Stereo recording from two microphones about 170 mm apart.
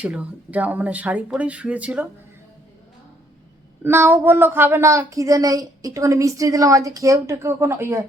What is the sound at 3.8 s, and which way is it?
Speech, 15° right (ahead or behind).